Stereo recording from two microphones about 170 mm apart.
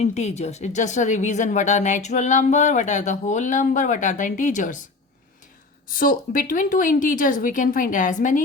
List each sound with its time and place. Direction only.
0.0 s speech: 40° left (ahead or behind)
5.9 s speech: 55° left (ahead or behind)